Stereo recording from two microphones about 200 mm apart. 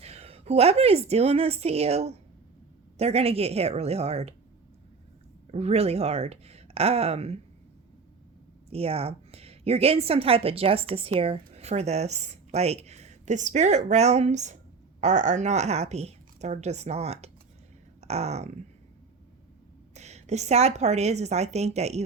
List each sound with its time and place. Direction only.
0.0 s a woman's voice: 30° right (ahead or behind)
5.5 s a woman's voice: 30° right (ahead or behind)
8.7 s a woman's voice: 30° right (ahead or behind)
19.9 s a woman's voice: 35° right (ahead or behind)